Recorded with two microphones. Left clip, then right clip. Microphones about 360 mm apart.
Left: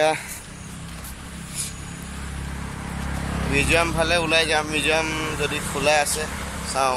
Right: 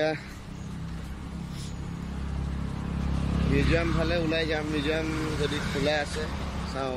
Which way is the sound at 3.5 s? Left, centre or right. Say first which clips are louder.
Left 7 dB; left.